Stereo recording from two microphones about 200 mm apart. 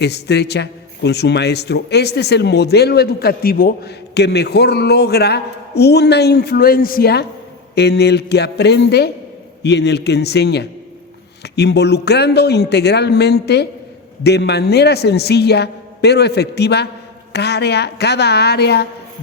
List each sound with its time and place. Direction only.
0.0 s a man's voice: 55° left (ahead or behind)